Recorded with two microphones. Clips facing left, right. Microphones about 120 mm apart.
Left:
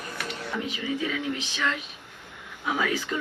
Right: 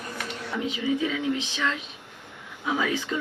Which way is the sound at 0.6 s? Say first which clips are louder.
Right 6 dB; 20° right (ahead or behind).